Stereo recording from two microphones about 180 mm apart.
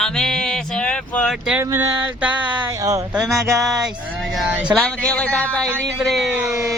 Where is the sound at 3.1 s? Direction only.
Centre (ahead or behind).